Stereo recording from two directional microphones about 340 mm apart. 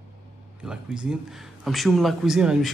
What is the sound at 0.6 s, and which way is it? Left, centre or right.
Speech, centre.